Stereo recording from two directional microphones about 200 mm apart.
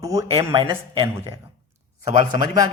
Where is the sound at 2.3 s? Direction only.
20° right (ahead or behind).